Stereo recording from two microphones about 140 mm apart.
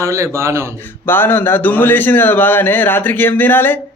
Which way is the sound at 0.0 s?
20° right (ahead or behind).